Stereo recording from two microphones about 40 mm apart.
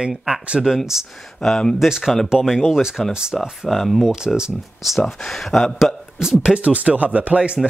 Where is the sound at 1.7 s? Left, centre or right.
Centre.